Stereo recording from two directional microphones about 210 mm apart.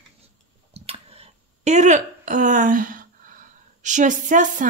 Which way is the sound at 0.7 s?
30° right (ahead or behind).